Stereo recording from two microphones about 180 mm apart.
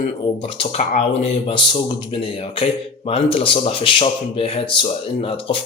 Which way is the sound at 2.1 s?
30° left (ahead or behind).